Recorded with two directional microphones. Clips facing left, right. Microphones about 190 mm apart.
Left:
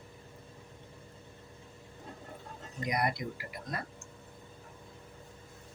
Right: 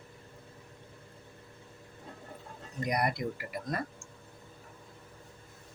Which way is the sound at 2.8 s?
50° right (ahead or behind).